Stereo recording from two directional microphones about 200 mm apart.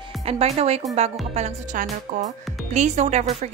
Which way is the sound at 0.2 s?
30° right (ahead or behind).